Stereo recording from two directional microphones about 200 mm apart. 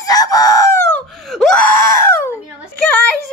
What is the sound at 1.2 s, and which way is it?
Speech, centre (ahead or behind).